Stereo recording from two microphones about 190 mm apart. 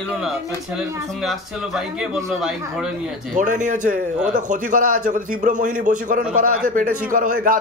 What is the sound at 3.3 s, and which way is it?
A man's voice, 40° right (ahead or behind).